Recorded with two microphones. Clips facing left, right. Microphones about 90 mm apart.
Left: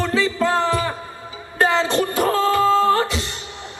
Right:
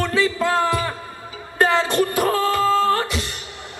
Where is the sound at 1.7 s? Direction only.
25° left (ahead or behind).